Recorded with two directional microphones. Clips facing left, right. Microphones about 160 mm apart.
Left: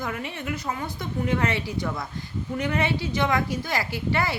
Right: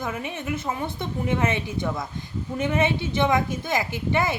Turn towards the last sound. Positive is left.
turn(degrees=-20)  # may be behind; listen again after turning